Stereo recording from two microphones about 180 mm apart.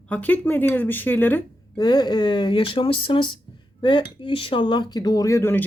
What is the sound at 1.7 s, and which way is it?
Speech, 20° left (ahead or behind).